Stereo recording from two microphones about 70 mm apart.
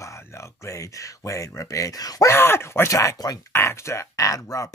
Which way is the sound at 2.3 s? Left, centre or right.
Left.